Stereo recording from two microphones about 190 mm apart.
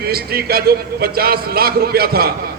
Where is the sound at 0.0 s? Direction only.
55° right (ahead or behind).